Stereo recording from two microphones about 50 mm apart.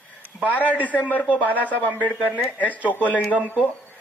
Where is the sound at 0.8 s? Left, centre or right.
Left.